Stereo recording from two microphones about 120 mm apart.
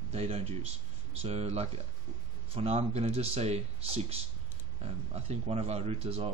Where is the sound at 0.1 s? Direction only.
60° right (ahead or behind).